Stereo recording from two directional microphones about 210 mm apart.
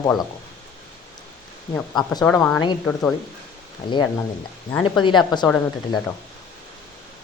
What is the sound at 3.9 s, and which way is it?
A woman's voice, 20° left (ahead or behind).